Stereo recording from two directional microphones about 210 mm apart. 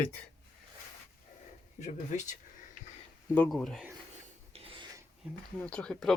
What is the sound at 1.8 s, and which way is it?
Speech, 35° left (ahead or behind).